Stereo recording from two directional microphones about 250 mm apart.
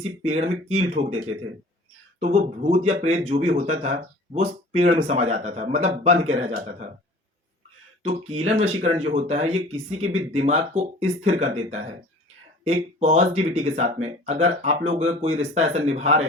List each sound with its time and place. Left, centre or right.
0.3 s speech: right
8.0 s speech: right